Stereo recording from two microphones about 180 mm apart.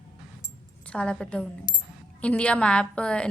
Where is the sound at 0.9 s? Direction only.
5° left (ahead or behind).